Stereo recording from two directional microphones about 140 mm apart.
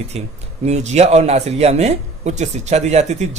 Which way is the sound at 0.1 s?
50° right (ahead or behind).